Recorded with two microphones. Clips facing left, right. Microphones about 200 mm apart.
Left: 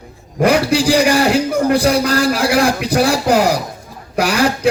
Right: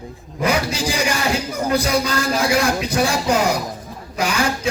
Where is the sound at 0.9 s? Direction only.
35° left (ahead or behind).